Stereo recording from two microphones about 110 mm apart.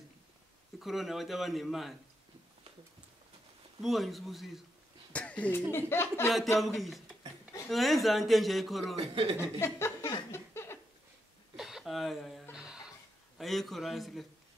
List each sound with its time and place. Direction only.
0.7 s a man's voice: centre (ahead or behind)
3.8 s a man's voice: centre (ahead or behind)
5.1 s a sound: 10° left (ahead or behind)
5.7 s speech: 20° left (ahead or behind)
6.6 s a man's voice: centre (ahead or behind)
9.1 s speech: 65° right (ahead or behind)
9.4 s speech: 25° left (ahead or behind)
10.3 s a sound: 20° left (ahead or behind)
11.5 s a sound: 5° right (ahead or behind)
12.5 s music: 5° right (ahead or behind)
13.4 s a man's voice: centre (ahead or behind)